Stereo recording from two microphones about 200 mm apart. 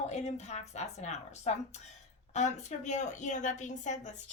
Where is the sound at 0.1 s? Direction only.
35° left (ahead or behind).